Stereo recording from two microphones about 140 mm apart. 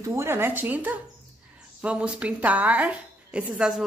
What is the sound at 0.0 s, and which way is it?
A woman's voice, 20° right (ahead or behind).